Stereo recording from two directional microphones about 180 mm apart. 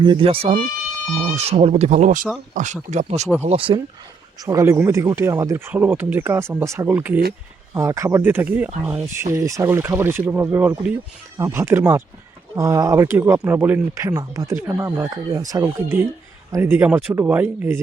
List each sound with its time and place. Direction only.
0.0 s speech: 25° right (ahead or behind)
4.4 s speech: 15° right (ahead or behind)